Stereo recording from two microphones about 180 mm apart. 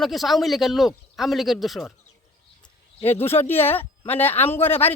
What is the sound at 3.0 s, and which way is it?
Speech, 15° left (ahead or behind).